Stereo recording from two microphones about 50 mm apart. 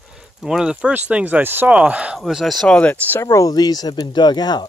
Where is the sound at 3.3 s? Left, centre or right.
Left.